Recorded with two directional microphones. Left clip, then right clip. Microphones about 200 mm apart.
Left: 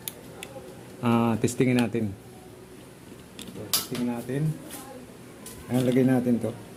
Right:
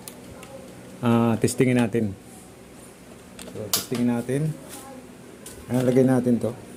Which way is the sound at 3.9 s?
45° right (ahead or behind).